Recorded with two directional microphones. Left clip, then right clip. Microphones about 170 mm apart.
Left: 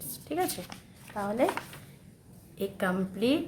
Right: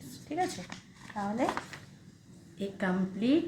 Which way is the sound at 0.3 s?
25° left (ahead or behind).